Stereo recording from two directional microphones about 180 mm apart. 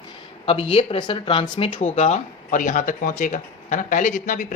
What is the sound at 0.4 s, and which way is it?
Speech, 30° left (ahead or behind).